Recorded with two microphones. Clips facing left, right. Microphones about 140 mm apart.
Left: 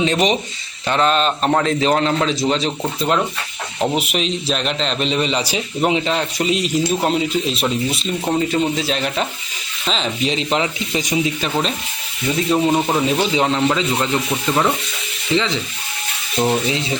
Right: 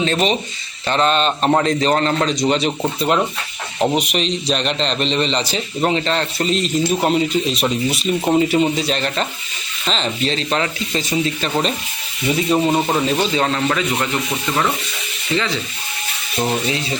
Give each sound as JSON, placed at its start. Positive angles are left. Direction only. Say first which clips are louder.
{"t": 0.0, "sound": "a man's voice", "louder": "left 1 dB", "side_deg": 15}
{"t": 4.0, "sound": "a man's voice", "louder": "right 1 dB", "side_deg": 5}
{"t": 10.3, "sound": "speech", "louder": "left 1 dB", "side_deg": 15}
{"t": 12.3, "sound": "speech", "louder": "even", "side_deg": -5}
{"t": 15.3, "sound": "sizzle", "louder": "left 2 dB", "side_deg": 20}
{"t": 16.6, "sound": "sizzle", "louder": "left 1 dB", "side_deg": 20}